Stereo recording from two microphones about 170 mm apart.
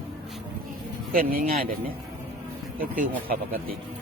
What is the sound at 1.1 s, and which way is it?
Speech, 55° right (ahead or behind).